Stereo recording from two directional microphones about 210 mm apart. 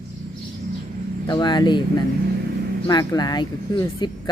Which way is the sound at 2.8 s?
15° left (ahead or behind).